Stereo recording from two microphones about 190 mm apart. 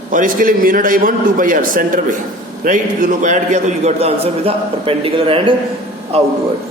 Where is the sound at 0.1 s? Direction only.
45° right (ahead or behind); by 5.5 s 30° right (ahead or behind).